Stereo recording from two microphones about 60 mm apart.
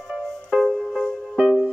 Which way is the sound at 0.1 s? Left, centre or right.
Centre.